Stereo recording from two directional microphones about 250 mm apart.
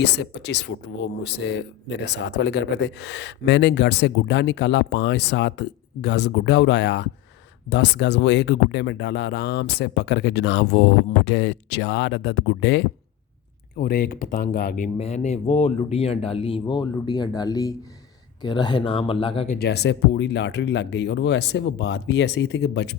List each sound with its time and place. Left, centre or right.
0.0 s speech: left
19.5 s speech: left